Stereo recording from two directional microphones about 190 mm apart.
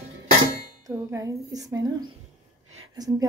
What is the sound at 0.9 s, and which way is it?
A woman's voice, 15° right (ahead or behind).